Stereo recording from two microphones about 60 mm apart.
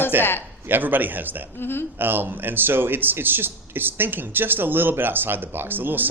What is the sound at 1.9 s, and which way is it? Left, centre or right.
A man's voice, right.